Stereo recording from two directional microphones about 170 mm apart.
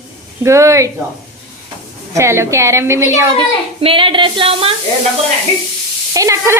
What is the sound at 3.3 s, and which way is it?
Speech, 30° right (ahead or behind).